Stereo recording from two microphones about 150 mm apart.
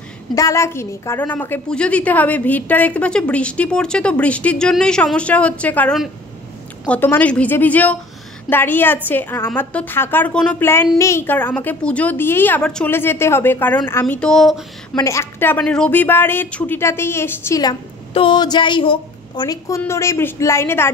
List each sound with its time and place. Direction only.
0.3 s a woman's voice: 20° left (ahead or behind); by 14.6 s centre (ahead or behind)
15.0 s a woman's voice: 20° left (ahead or behind)
18.1 s a woman's voice: 30° left (ahead or behind); by 20.9 s 15° left (ahead or behind)